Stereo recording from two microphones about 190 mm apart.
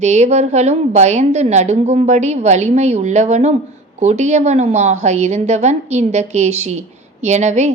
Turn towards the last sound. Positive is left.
turn(degrees=-40)  # may be behind; listen again after turning